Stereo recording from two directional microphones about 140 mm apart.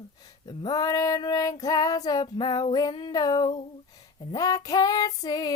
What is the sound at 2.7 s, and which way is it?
Female singing, 30° left (ahead or behind).